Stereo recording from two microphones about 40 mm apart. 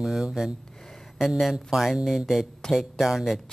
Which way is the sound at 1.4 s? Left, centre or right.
Centre.